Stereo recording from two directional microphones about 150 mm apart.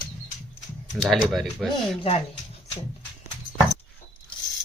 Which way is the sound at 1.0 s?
Centre (ahead or behind).